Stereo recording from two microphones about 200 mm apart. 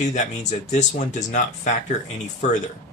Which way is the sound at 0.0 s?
35° left (ahead or behind).